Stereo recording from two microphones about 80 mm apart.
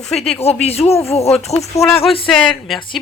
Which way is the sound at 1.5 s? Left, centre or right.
Left.